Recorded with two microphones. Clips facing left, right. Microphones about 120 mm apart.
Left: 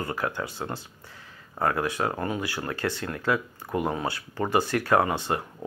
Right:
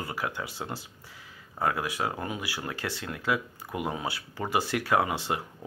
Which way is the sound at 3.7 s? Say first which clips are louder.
Left 5 dB; 40° left (ahead or behind).